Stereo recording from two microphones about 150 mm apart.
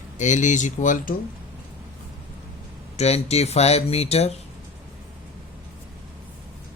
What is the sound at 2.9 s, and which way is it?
Speech, 45° left (ahead or behind).